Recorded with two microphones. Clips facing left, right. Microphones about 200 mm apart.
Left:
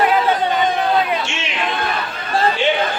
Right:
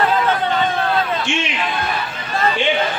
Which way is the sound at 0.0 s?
15° left (ahead or behind).